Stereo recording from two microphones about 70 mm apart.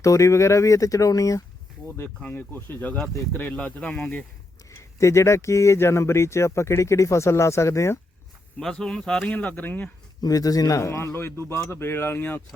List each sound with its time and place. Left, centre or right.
0.0 s speech: left
2.2 s a man's voice: left
3.8 s speech: centre
4.7 s speech: left
8.5 s speech: centre
9.3 s speech: left
10.2 s a man's voice: left